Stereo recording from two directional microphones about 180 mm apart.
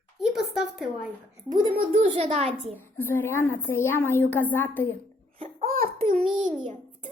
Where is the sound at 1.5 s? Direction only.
25° right (ahead or behind).